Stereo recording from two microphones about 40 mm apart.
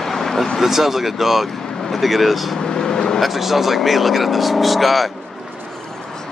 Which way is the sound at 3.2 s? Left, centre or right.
Centre.